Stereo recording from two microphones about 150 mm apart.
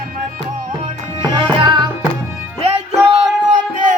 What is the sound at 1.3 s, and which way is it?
Music, 30° right (ahead or behind).